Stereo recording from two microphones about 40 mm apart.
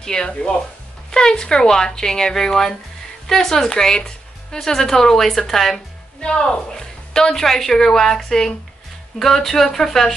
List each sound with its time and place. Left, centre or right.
0.0 s a woman's voice: centre
6.2 s a woman's voice: left